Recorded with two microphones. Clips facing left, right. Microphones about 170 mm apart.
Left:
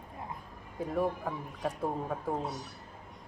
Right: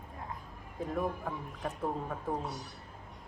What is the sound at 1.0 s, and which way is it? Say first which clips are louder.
A woman's voice: left 4 dB; 5° left (ahead or behind).